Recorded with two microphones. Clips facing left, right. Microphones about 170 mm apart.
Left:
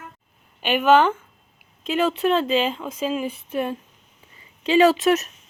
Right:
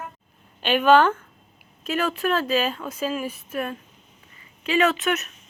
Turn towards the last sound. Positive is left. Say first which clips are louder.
# left 6 dB
turn(degrees=35)  # may be behind; listen again after turning